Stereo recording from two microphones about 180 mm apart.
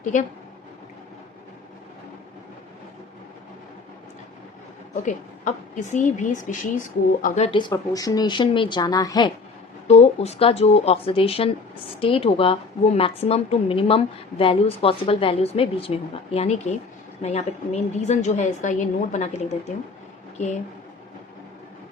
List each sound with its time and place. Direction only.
0.0 s speech: 45° left (ahead or behind)
5.0 s speech: 45° left (ahead or behind); by 9.3 s 20° left (ahead or behind)
9.8 s a woman's voice: 35° left (ahead or behind)